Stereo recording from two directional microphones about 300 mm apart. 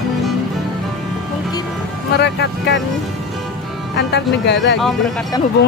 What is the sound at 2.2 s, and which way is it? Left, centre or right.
Speech, left.